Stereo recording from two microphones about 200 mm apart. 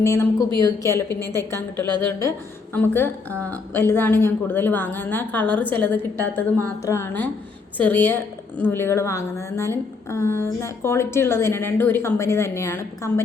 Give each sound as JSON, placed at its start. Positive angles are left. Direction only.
{"t": 0.0, "sound": "a woman's voice", "side_deg": 15}
{"t": 1.2, "sound": "a woman's voice", "side_deg": -20}
{"t": 1.5, "sound": "a woman's voice", "side_deg": 10}